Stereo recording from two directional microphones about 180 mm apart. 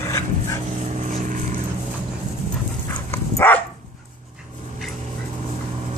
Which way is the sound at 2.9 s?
15° left (ahead or behind).